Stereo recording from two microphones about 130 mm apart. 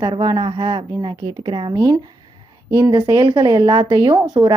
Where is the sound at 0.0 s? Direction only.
30° right (ahead or behind).